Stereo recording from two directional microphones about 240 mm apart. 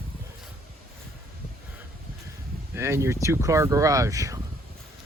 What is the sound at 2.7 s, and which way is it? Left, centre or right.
Speech, centre.